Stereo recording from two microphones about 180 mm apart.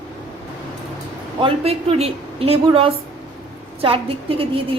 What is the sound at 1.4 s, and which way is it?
A woman's voice, 30° right (ahead or behind).